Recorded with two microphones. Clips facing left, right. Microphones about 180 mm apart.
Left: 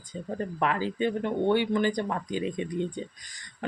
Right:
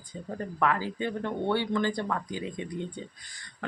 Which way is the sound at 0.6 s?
20° left (ahead or behind).